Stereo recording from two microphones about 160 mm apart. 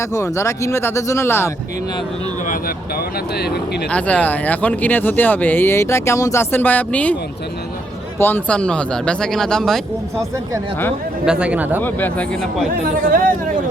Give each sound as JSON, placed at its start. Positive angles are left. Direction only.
{"t": 0.0, "sound": "speech", "side_deg": 20}
{"t": 2.5, "sound": "speech", "side_deg": 70}
{"t": 3.8, "sound": "speech", "side_deg": 10}
{"t": 8.2, "sound": "speech", "side_deg": 10}
{"t": 11.3, "sound": "speech", "side_deg": -5}
{"t": 11.8, "sound": "speech", "side_deg": 10}
{"t": 13.1, "sound": "speech", "side_deg": -60}